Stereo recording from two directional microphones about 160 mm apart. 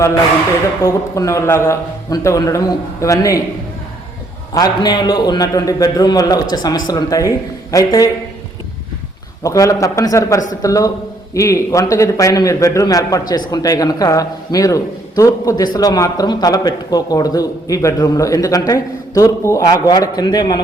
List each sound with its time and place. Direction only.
0.8 s a man's voice: 20° left (ahead or behind)
4.5 s a man's voice: 25° left (ahead or behind)
9.4 s a man's voice: 20° left (ahead or behind)